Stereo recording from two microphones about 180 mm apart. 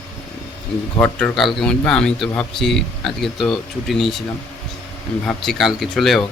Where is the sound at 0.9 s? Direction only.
5° left (ahead or behind).